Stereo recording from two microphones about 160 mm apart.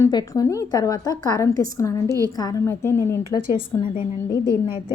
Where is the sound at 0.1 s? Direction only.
25° left (ahead or behind).